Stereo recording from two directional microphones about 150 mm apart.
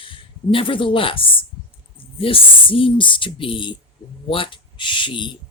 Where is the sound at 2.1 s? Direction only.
35° left (ahead or behind).